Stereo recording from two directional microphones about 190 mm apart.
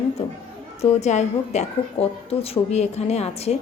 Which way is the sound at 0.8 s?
35° left (ahead or behind).